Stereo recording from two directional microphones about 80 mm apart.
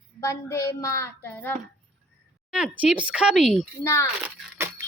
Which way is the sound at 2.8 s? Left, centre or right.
Centre.